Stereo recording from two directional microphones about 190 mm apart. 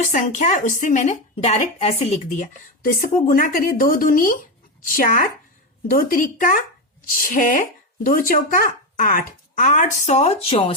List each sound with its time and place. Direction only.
0.0 s speech: 40° left (ahead or behind)